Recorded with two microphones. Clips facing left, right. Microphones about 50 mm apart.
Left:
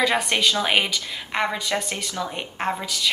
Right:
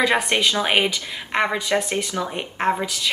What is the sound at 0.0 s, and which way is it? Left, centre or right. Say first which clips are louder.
A woman's voice: right 2 dB; centre.